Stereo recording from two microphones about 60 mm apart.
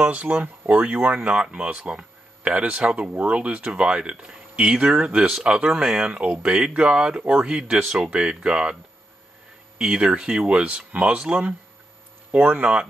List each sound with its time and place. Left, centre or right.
0.0 s speech: right
9.8 s speech: centre